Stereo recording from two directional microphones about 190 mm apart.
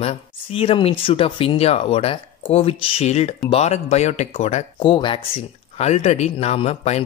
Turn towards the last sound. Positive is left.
turn(degrees=35)  # may be behind; listen again after turning